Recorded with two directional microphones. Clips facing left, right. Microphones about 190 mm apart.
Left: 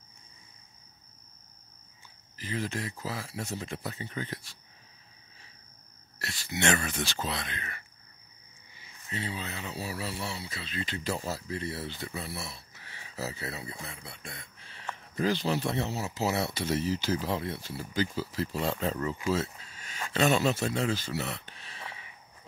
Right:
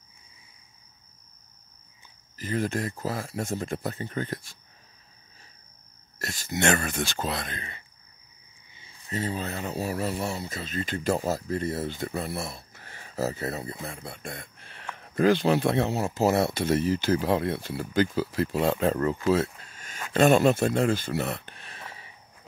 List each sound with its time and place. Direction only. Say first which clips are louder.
2.3 s speech: right 6 dB; 50° right (ahead or behind)
6.1 s speech: right 4 dB; 45° right (ahead or behind)
9.1 s speech: right 6 dB; 45° right (ahead or behind)
19.2 s a sound: right 5 dB; 55° right (ahead or behind)
20.1 s speech: right 6 dB; 50° right (ahead or behind)